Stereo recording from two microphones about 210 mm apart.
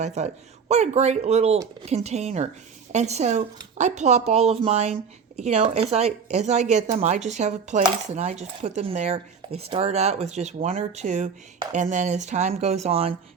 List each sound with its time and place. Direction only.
0.0 s a woman's voice: 35° right (ahead or behind)